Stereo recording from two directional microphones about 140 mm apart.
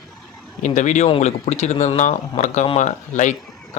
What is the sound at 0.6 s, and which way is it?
Speech, 60° left (ahead or behind).